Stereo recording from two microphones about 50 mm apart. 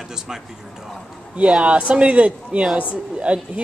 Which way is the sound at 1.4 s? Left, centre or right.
Right.